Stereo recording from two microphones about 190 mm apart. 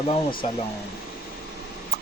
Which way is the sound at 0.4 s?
35° left (ahead or behind).